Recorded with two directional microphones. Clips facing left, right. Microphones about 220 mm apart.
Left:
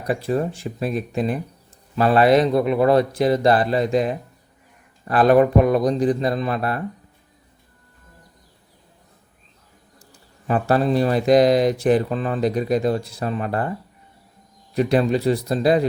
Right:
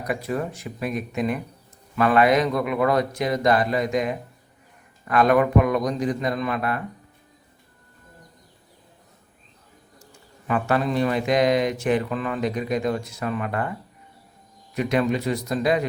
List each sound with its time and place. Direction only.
0.0 s speech: 30° left (ahead or behind)
10.4 s speech: 35° left (ahead or behind)